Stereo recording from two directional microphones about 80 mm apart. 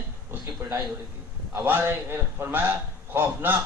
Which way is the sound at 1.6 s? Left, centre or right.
Right.